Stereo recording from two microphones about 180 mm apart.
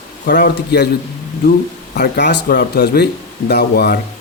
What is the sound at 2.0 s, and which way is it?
Speech, 65° left (ahead or behind).